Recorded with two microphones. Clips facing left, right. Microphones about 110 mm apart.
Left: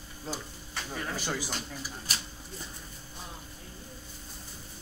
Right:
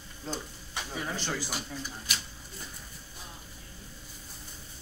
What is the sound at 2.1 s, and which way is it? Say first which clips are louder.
Speech: even; 35° left (ahead or behind).